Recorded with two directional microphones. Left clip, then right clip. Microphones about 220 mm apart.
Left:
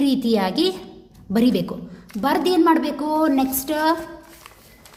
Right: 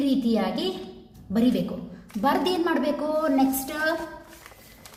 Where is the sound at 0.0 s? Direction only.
40° left (ahead or behind).